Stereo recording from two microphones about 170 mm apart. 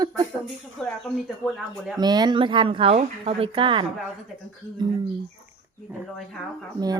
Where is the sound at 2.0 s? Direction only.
25° right (ahead or behind).